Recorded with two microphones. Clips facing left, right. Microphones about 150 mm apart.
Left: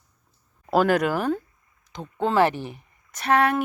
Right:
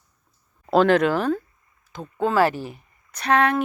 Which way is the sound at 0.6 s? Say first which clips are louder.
Right 3 dB; 10° left (ahead or behind).